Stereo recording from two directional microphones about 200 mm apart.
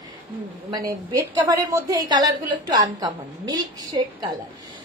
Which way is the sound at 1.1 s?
15° right (ahead or behind).